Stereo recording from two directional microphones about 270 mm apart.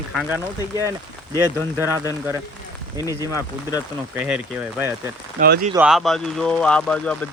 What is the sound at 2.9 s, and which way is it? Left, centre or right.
Speech, centre.